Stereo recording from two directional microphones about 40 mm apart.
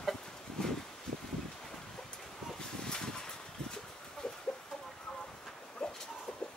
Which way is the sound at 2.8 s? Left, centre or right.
Centre.